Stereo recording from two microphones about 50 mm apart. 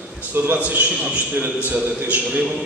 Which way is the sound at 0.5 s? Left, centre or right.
Right.